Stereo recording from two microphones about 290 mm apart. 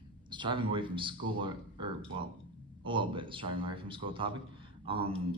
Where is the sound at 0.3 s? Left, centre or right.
Centre.